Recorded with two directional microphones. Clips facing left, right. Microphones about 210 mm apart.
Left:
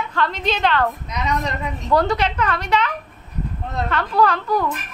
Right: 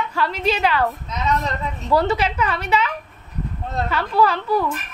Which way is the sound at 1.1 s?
15° left (ahead or behind).